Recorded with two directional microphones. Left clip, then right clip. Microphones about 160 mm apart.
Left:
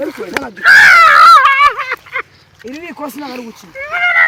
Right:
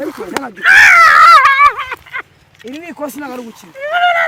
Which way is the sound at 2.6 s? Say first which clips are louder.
Right 1 dB; 5° right (ahead or behind).